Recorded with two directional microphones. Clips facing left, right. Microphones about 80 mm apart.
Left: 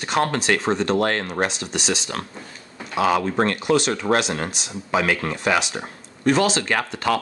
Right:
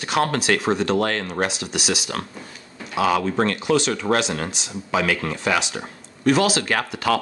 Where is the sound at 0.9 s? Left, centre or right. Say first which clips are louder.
Left 1 dB; left.